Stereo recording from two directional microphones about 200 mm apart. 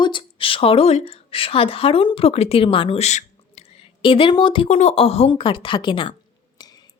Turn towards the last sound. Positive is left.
turn(degrees=25)  # may be behind; listen again after turning